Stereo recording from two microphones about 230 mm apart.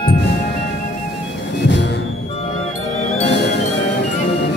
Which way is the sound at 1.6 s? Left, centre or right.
Left.